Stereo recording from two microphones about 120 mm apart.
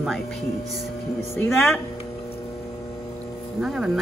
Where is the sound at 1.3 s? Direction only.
20° left (ahead or behind).